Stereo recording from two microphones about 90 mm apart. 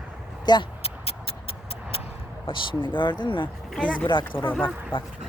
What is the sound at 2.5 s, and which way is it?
Speech, 65° left (ahead or behind).